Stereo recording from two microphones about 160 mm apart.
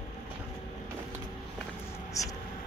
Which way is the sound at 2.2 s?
20° left (ahead or behind).